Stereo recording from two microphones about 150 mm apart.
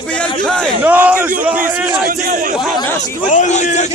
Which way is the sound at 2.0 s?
75° right (ahead or behind).